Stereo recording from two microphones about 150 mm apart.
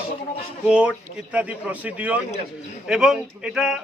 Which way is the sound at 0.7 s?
10° right (ahead or behind).